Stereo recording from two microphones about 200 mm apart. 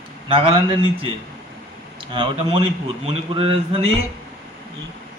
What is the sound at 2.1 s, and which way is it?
A man's voice, 25° right (ahead or behind).